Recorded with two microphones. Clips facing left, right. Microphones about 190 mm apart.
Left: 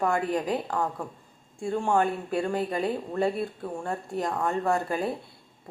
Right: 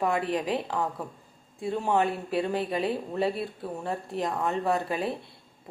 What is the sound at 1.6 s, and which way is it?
Speech, 5° right (ahead or behind).